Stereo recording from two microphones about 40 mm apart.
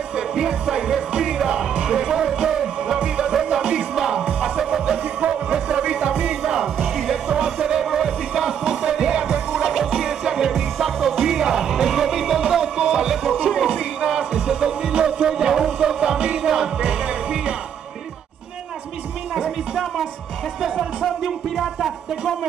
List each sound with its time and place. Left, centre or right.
0.1 s music: centre
6.6 s music: centre
7.3 s music: centre
19.3 s music: centre
21.5 s speech: centre